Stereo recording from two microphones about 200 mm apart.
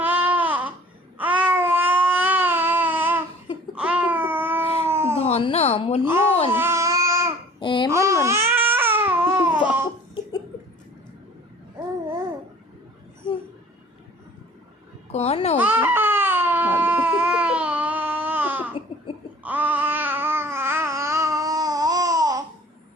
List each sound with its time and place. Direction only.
0.0 s babbling: 10° right (ahead or behind)
5.2 s a sound: 30° left (ahead or behind)
6.5 s babbling: 10° right (ahead or behind)
7.6 s babbling: 25° left (ahead or behind)
7.9 s babbling: 15° right (ahead or behind)
8.2 s baby cry: 15° right (ahead or behind)
9.6 s babbling: 10° right (ahead or behind)
15.1 s a sound: 30° left (ahead or behind)
15.5 s baby cry: 10° right (ahead or behind)
19.4 s babbling: 10° right (ahead or behind)